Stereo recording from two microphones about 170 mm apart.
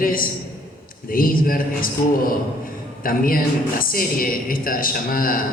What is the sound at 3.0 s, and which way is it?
A woman's voice, 55° left (ahead or behind).